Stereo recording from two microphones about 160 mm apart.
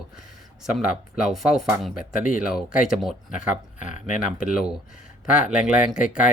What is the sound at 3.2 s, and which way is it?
Speech, 50° left (ahead or behind).